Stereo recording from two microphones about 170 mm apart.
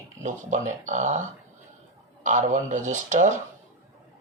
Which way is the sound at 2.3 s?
50° right (ahead or behind).